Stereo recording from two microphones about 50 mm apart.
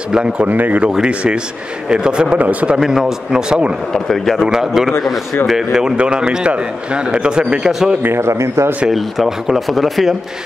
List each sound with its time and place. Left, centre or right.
0.1 s speech: centre
0.5 s speech: right
0.8 s a man's voice: centre
2.3 s speech: right
2.8 s a man's voice: centre
3.9 s a man's voice: centre
4.4 s a man's voice: centre
8.2 s speech: right
8.9 s speech: centre